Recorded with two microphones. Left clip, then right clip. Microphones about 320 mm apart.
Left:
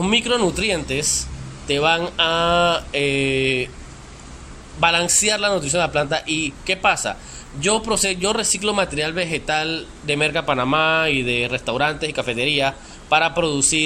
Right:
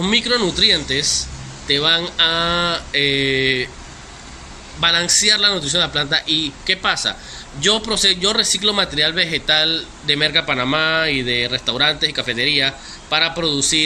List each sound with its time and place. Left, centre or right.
0.0 s a man's voice: centre
4.8 s a man's voice: centre